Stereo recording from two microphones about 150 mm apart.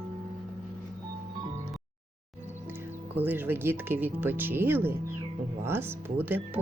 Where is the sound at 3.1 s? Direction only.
15° right (ahead or behind).